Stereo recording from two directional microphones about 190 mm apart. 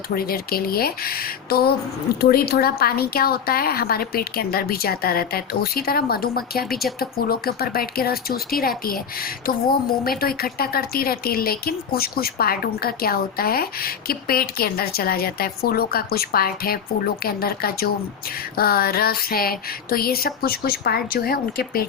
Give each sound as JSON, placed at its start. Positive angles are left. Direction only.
{"t": 0.1, "sound": "speech", "side_deg": 50}
{"t": 10.0, "sound": "speech", "side_deg": 50}